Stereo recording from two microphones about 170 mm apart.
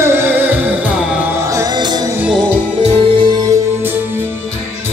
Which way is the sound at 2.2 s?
10° right (ahead or behind).